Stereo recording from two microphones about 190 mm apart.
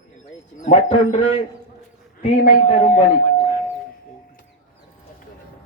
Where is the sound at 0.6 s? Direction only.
40° left (ahead or behind).